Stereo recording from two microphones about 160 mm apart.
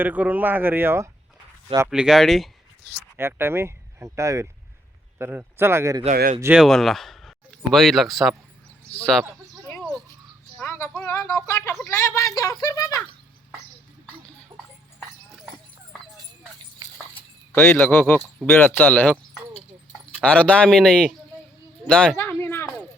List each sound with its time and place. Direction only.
0.0 s speech: 10° right (ahead or behind)
1.9 s speech: 5° right (ahead or behind)
3.2 s a man's voice: 15° right (ahead or behind)
6.4 s speech: 5° right (ahead or behind)
10.6 s speech: 15° left (ahead or behind)
17.5 s speech: 15° left (ahead or behind)
21.8 s a sound: 5° left (ahead or behind)